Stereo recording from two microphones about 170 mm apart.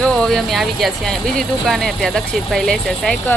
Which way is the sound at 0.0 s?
5° left (ahead or behind).